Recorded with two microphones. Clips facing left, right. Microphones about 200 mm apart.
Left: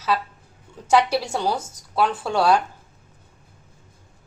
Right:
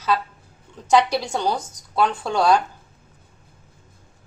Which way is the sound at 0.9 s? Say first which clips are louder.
Right 1 dB; 10° left (ahead or behind).